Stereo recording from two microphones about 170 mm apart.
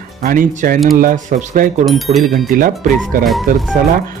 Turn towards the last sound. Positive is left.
turn(degrees=-55)  # may be behind; listen again after turning